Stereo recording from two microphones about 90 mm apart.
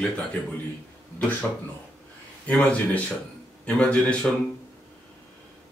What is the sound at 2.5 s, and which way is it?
Speech, 15° left (ahead or behind).